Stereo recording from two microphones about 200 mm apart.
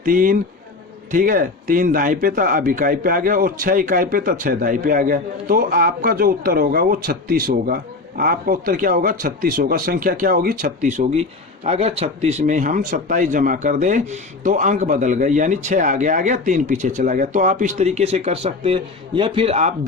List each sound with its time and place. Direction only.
0.0 s speech: 45° right (ahead or behind)